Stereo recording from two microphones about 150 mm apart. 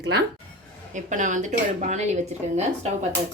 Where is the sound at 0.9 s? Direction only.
55° right (ahead or behind).